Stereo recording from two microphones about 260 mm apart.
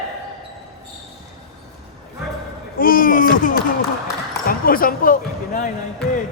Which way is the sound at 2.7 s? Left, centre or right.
Left.